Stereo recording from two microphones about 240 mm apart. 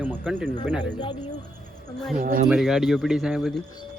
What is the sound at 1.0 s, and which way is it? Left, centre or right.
Speech, centre.